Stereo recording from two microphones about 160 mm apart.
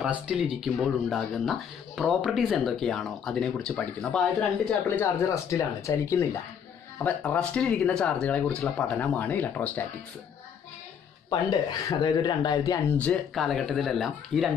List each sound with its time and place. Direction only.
0.0 s speech: 5° right (ahead or behind); by 9.8 s 10° left (ahead or behind)
11.8 s speech: 25° left (ahead or behind)
12.9 s speech: 5° left (ahead or behind)